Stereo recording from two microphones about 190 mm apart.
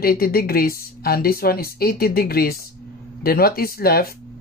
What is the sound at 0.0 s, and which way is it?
Speech, 50° left (ahead or behind).